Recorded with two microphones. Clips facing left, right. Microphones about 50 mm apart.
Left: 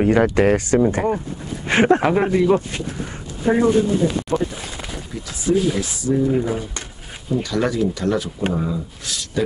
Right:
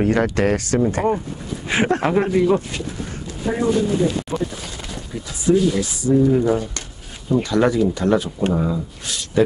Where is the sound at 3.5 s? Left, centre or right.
Left.